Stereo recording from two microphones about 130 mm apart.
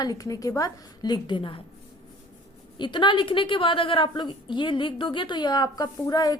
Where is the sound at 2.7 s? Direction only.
35° left (ahead or behind).